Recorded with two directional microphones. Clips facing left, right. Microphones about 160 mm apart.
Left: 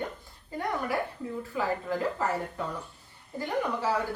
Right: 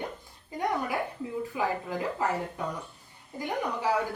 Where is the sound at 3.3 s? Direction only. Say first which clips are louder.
Left 2 dB; 15° right (ahead or behind).